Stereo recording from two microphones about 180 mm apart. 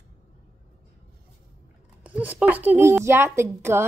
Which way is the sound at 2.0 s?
10° right (ahead or behind).